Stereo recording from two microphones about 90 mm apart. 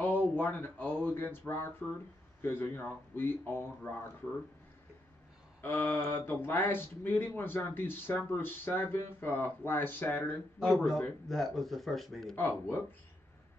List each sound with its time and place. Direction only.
0.0 s speech: 20° left (ahead or behind)
5.6 s speech: 25° left (ahead or behind)
11.2 s a man's voice: centre (ahead or behind)
12.4 s speech: 20° left (ahead or behind)